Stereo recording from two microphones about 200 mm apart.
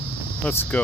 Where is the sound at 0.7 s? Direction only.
5° left (ahead or behind).